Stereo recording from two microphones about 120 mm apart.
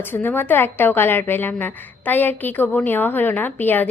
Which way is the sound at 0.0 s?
15° left (ahead or behind).